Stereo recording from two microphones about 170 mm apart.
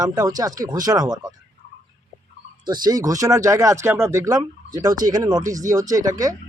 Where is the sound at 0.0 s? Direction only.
20° right (ahead or behind).